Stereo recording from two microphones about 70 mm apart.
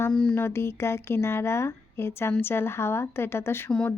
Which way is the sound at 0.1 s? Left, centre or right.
Centre.